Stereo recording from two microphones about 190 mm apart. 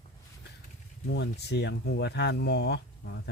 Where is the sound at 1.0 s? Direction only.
60° left (ahead or behind).